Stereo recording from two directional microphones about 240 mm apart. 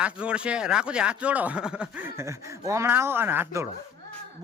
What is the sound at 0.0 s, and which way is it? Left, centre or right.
Speech, centre.